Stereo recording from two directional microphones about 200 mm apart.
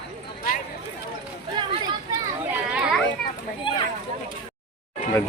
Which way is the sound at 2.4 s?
5° right (ahead or behind).